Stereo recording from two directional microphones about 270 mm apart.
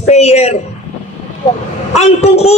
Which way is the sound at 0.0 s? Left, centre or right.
Left.